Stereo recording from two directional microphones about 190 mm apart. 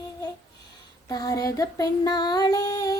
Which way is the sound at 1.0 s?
20° left (ahead or behind).